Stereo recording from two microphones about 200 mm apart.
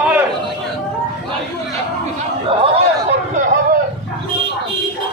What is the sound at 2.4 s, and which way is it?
Chatter, 25° right (ahead or behind).